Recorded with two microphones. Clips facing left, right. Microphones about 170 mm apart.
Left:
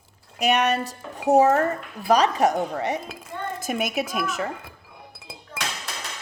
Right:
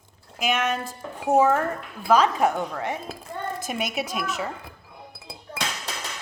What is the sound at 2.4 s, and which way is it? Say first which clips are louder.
Speech: left 2 dB; 40° left (ahead or behind).